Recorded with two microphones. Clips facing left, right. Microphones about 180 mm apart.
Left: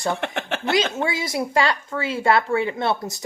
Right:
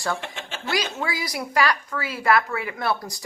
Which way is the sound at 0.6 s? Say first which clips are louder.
Left 4 dB; 20° left (ahead or behind).